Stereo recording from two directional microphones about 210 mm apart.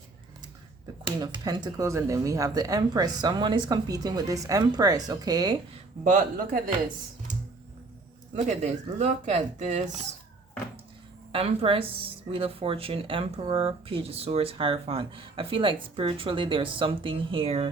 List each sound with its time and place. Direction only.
1.2 s speech: 20° right (ahead or behind)
6.1 s speech: 40° right (ahead or behind)
8.4 s speech: 35° right (ahead or behind)
11.3 s speech: 25° right (ahead or behind)